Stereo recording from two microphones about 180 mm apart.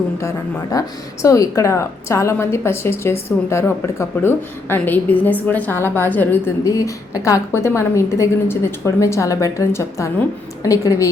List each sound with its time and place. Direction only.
0.2 s speech: 15° left (ahead or behind)